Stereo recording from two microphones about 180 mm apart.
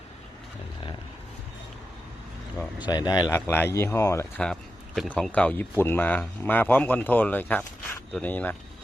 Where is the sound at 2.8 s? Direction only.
25° left (ahead or behind).